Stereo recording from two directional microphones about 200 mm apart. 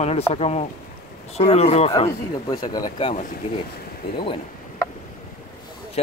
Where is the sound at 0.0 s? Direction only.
30° left (ahead or behind).